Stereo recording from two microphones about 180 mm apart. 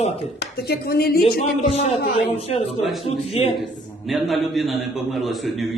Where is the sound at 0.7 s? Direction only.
60° left (ahead or behind).